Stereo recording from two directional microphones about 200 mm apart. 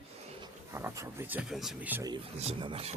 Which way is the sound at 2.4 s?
30° right (ahead or behind).